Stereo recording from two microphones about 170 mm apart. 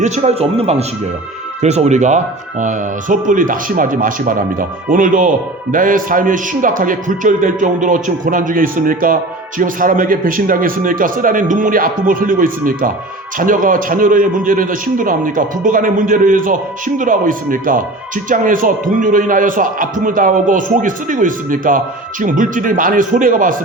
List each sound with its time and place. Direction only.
0.0 s a man's voice: 40° right (ahead or behind)